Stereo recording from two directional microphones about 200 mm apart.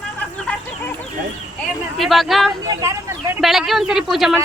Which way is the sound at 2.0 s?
Centre (ahead or behind).